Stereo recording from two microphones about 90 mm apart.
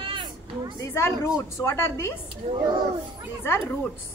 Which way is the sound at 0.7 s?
35° left (ahead or behind).